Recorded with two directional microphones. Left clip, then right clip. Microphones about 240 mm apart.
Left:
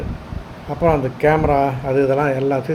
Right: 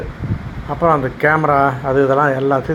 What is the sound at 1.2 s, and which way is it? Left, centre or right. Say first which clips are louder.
Speech: right 2 dB; right.